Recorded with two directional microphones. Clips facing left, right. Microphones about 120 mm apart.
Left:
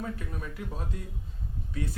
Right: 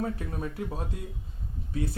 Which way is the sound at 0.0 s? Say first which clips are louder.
Right 5 dB; 35° right (ahead or behind).